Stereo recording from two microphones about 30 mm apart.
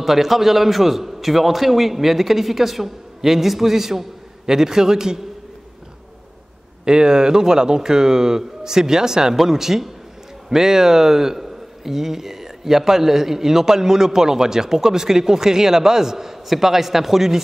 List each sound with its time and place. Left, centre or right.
0.0 s a man's voice: centre
6.8 s a man's voice: right; by 17.4 s centre